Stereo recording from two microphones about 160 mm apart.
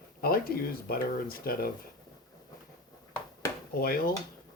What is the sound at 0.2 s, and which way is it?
Speech, 70° left (ahead or behind).